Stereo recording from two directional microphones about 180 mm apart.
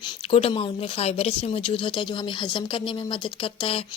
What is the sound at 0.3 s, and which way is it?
Speech, 30° left (ahead or behind).